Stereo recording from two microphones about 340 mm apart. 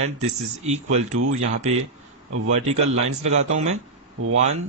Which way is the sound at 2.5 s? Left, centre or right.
Centre.